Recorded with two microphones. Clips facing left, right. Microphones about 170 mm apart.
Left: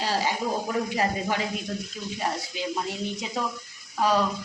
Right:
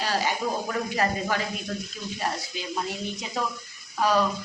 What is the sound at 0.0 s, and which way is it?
Speech, 25° left (ahead or behind).